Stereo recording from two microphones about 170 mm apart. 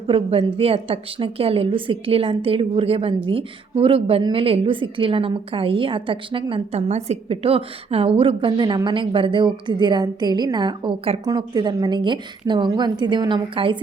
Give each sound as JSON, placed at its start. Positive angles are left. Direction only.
{"t": 0.1, "sound": "a woman's voice", "side_deg": -30}